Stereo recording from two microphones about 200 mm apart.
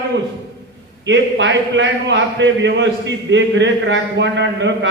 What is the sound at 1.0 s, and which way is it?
A man's voice, 65° right (ahead or behind).